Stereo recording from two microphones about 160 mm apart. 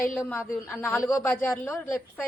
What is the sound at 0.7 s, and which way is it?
Speech, 15° left (ahead or behind).